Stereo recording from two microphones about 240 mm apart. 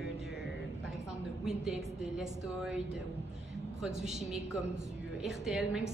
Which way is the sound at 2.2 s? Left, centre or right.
Centre.